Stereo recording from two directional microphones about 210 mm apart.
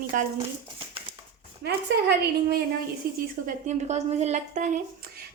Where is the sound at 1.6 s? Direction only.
50° right (ahead or behind).